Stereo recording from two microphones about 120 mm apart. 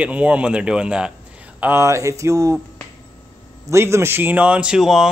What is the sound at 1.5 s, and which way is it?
Speech, 20° right (ahead or behind).